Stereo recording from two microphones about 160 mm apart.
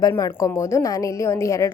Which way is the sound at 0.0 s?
20° left (ahead or behind).